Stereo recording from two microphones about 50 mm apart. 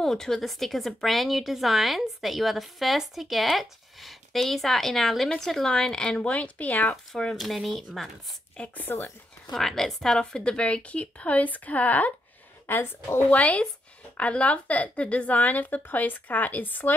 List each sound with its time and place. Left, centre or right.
0.0 s speech: centre; by 7.0 s left
7.3 s speech: centre
8.5 s a woman's voice: left
9.5 s a woman's voice: centre; by 12.1 s left
12.6 s speech: left
13.3 s a woman's voice: left